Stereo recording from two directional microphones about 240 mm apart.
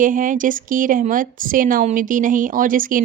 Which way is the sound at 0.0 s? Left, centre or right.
Right.